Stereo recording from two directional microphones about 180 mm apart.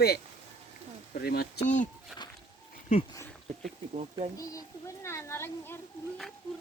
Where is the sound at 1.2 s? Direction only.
60° left (ahead or behind).